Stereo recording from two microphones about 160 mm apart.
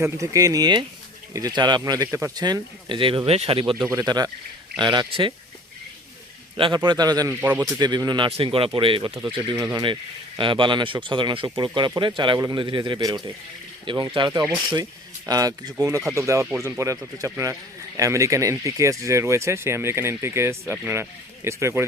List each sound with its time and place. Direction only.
0.0 s speech: 20° right (ahead or behind); by 3.8 s 35° right (ahead or behind)
3.8 s speech: 20° right (ahead or behind)
6.6 s speech: 30° right (ahead or behind)
7.3 s speech: 10° right (ahead or behind)
7.8 s speech: 25° right (ahead or behind)